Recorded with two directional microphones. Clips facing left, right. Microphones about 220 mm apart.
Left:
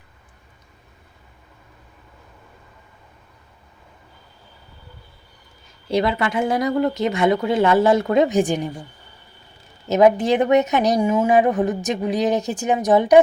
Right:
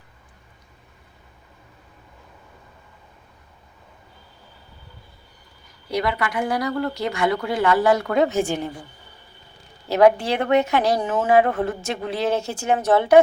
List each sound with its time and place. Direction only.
5.6 s speech: 25° left (ahead or behind)
9.9 s a woman's voice: 20° left (ahead or behind)